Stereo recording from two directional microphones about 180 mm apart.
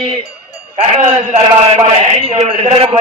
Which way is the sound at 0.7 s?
40° right (ahead or behind).